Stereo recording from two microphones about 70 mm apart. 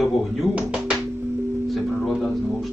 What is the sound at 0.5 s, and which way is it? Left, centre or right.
Speech, centre.